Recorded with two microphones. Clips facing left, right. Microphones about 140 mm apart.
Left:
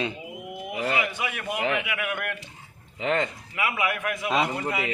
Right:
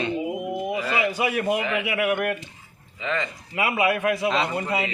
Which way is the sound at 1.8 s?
30° right (ahead or behind).